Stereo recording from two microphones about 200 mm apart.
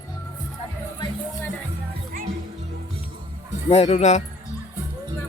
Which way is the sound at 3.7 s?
35° left (ahead or behind).